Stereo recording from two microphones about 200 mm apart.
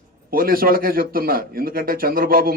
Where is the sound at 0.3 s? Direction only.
45° right (ahead or behind).